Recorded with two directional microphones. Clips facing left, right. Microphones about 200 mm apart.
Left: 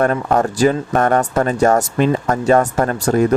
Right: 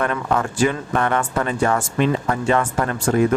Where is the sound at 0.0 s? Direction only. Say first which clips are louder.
Left 6 dB; 40° left (ahead or behind).